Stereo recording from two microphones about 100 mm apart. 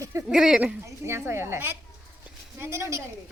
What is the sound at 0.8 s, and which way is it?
Speech, 25° right (ahead or behind).